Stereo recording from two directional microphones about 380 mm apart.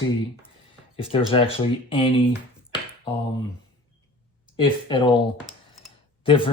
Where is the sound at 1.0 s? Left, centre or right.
Centre.